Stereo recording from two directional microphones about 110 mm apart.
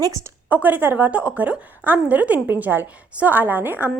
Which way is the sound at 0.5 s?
15° right (ahead or behind).